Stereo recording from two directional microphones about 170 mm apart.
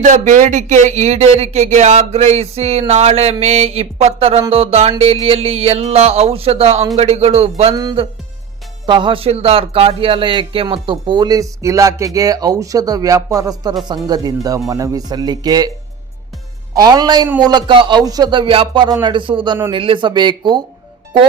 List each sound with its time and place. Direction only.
0.0 s speech: 45° right (ahead or behind)
7.8 s speech: 25° right (ahead or behind)
16.7 s speech: 20° right (ahead or behind)